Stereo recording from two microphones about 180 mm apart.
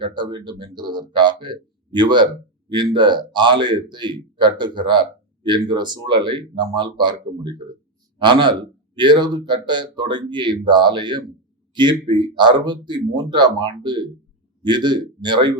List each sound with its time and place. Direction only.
0.0 s speech: 25° right (ahead or behind)